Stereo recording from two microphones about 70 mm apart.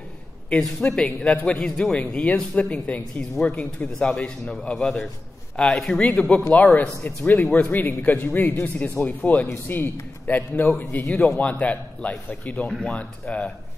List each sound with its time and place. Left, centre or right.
0.5 s a man's voice: centre
0.8 s a man's voice: centre
5.9 s speech: centre
11.2 s speech: centre